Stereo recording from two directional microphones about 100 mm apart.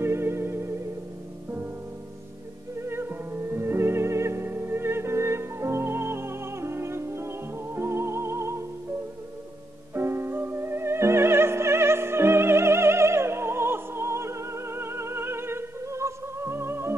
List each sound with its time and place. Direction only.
0.0 s music: 25° right (ahead or behind)
2.8 s music: 25° right (ahead or behind)
9.9 s music: 25° right (ahead or behind)